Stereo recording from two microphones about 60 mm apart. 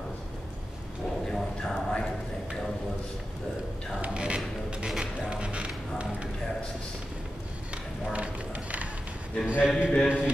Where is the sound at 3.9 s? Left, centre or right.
Centre.